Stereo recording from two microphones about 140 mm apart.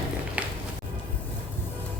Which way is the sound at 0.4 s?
10° right (ahead or behind).